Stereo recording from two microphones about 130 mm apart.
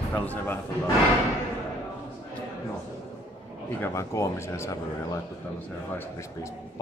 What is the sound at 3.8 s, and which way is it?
Speech, 20° left (ahead or behind).